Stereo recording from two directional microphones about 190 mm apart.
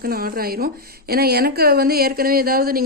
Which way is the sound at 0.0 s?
50° right (ahead or behind).